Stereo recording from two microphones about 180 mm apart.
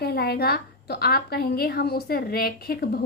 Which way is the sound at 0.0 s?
60° left (ahead or behind).